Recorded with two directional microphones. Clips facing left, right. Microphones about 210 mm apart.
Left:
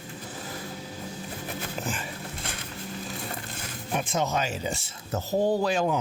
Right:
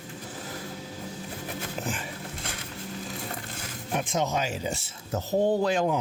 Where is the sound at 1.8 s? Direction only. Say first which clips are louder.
Right 1 dB; 15° right (ahead or behind).